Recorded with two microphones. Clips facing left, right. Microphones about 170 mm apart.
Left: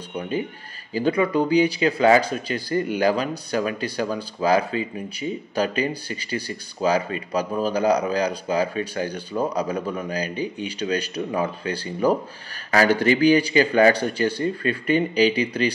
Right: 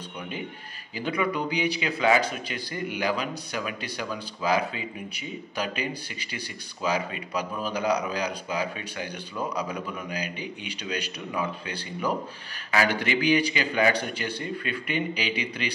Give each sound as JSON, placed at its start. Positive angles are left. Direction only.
{"t": 0.9, "sound": "speech", "side_deg": 35}